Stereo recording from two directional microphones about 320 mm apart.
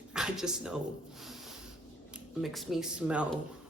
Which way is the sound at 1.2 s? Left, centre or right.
Centre.